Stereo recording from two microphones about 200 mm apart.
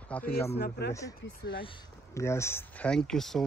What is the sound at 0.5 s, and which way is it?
Speech, 55° left (ahead or behind).